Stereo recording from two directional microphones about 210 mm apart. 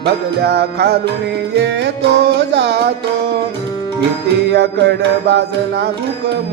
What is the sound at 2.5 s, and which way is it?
Music, 50° right (ahead or behind).